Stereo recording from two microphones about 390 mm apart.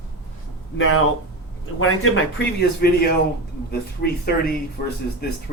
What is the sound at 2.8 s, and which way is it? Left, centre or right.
Speech, left.